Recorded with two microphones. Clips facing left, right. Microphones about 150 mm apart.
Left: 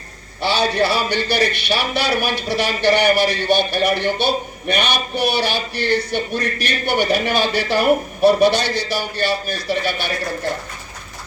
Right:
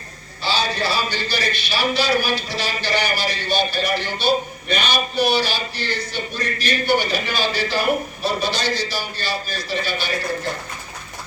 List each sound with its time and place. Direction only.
0.4 s speech: 65° left (ahead or behind)